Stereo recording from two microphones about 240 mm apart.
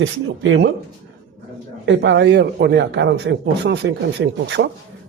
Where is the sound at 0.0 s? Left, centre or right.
Right.